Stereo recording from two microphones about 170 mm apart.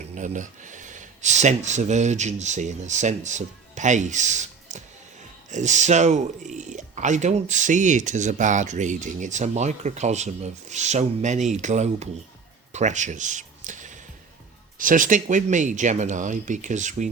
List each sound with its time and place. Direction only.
0.1 s speech: 45° right (ahead or behind)
12.7 s a sound: 45° right (ahead or behind)
14.8 s speech: 50° right (ahead or behind)